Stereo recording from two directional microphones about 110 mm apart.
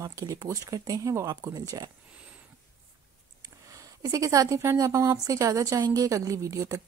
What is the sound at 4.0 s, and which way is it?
Speech, 30° right (ahead or behind).